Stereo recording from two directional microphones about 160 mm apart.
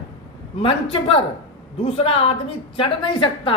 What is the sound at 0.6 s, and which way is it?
A woman's voice, 35° left (ahead or behind).